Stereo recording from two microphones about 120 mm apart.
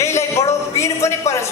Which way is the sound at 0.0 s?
25° left (ahead or behind).